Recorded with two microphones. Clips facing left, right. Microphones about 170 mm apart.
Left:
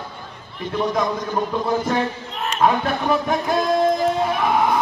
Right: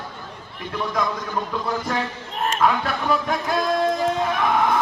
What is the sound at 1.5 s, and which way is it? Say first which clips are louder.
Speech: left 5 dB; 20° left (ahead or behind).